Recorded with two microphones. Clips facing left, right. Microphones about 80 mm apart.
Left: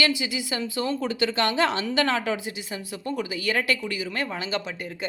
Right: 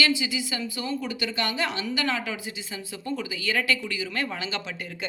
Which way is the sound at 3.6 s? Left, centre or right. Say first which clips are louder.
Left 1 dB; left.